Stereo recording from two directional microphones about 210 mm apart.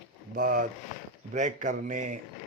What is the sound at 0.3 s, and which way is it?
Speech, 45° right (ahead or behind).